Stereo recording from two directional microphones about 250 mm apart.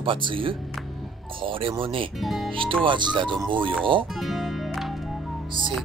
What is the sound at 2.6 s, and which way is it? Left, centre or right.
Speech, centre.